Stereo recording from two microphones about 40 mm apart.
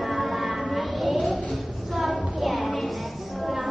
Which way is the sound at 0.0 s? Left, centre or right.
Centre.